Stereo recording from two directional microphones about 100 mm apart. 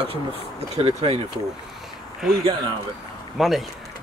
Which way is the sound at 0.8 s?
90° right.